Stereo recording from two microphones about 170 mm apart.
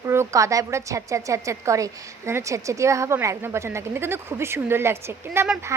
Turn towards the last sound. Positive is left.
turn(degrees=-15)  # may be behind; listen again after turning